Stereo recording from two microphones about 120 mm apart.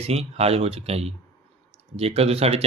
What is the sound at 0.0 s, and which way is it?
A man's voice, 60° right (ahead or behind).